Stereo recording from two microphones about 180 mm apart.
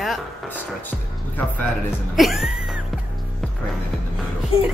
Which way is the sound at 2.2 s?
Centre (ahead or behind).